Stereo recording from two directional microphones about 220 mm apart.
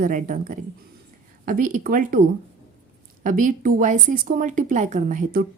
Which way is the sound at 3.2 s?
35° right (ahead or behind).